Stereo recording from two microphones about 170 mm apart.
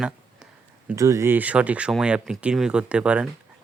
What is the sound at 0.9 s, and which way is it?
Speech, 20° right (ahead or behind).